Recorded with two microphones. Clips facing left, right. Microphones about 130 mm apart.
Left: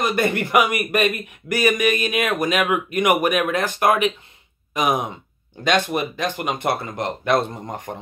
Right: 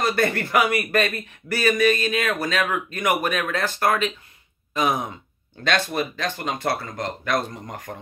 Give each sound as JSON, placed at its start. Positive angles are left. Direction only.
{"t": 0.0, "sound": "a man's voice", "side_deg": 15}